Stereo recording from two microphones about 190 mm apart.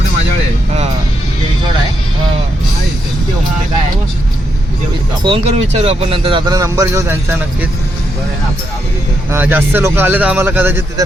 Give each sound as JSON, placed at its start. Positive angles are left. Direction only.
{"t": 5.2, "sound": "speech", "side_deg": -30}
{"t": 9.3, "sound": "a man's voice", "side_deg": -10}